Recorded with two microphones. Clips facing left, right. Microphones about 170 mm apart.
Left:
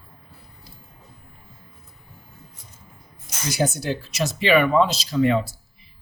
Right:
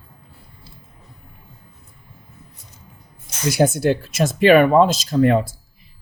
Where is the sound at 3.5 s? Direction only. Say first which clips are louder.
Right 7 dB; 55° right (ahead or behind).